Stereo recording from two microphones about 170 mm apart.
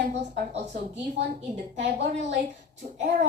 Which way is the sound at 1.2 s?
90° right.